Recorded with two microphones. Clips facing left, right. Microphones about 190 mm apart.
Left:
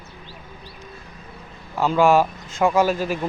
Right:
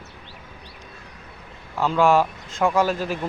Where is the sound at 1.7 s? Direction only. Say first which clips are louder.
Left 2 dB; 5° left (ahead or behind).